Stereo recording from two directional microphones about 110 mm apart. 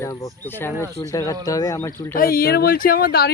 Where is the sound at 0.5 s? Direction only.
20° left (ahead or behind).